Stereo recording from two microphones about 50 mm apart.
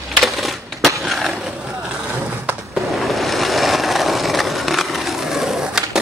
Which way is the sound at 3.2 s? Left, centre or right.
Centre.